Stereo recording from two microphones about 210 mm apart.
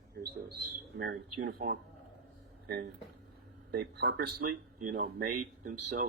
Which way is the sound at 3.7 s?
50° right (ahead or behind).